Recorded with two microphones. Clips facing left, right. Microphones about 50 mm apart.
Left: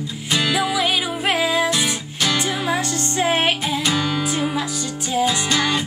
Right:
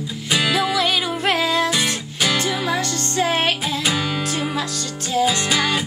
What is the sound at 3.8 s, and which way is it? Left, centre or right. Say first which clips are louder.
Music: left 1 dB; centre.